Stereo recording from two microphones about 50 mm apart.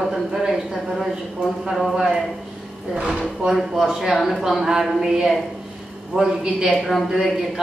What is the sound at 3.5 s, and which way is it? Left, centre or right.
A man's voice, centre.